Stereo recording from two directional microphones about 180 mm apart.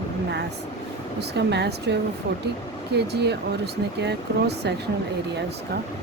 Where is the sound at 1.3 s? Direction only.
70° right (ahead or behind).